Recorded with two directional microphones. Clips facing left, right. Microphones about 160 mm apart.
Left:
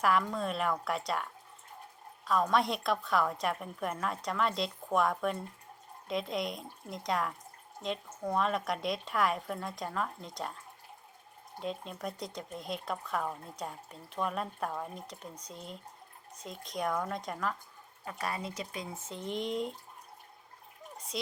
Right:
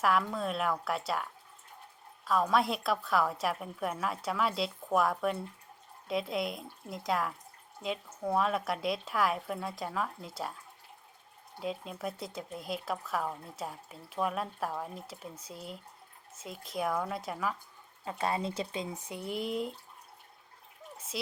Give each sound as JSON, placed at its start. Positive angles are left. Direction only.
{"t": 0.0, "sound": "speech", "side_deg": 0}
{"t": 11.6, "sound": "speech", "side_deg": -5}
{"t": 18.0, "sound": "speech", "side_deg": -25}
{"t": 19.0, "sound": "speech", "side_deg": -10}
{"t": 20.9, "sound": "a sound", "side_deg": -5}